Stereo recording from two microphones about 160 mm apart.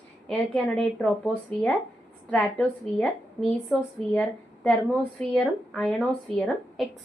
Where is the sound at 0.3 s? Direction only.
5° left (ahead or behind).